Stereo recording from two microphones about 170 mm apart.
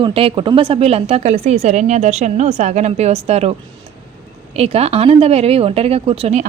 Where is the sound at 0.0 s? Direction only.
30° right (ahead or behind).